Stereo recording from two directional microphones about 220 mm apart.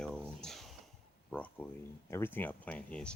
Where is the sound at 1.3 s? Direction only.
5° left (ahead or behind).